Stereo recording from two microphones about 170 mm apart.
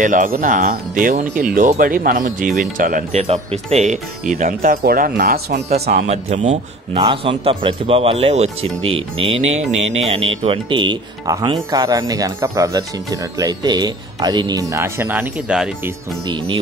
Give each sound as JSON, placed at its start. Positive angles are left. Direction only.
{"t": 0.0, "sound": "speech", "side_deg": -50}
{"t": 5.7, "sound": "speech", "side_deg": -45}
{"t": 7.0, "sound": "speech", "side_deg": -30}
{"t": 16.3, "sound": "speech", "side_deg": -25}